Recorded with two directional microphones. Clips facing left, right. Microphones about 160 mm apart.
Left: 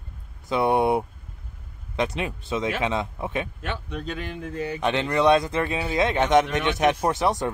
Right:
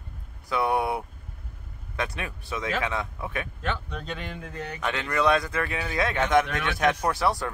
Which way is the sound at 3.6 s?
5° left (ahead or behind).